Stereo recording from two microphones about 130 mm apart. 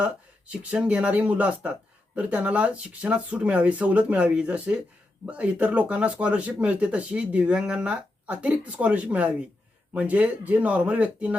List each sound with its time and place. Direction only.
0.0 s speech: 10° right (ahead or behind)